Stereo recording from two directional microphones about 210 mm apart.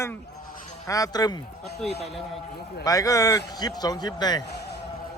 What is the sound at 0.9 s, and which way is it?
Speech, 15° left (ahead or behind).